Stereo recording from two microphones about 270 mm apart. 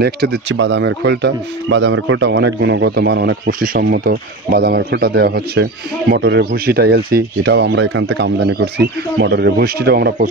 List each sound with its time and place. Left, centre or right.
0.0 s speech: right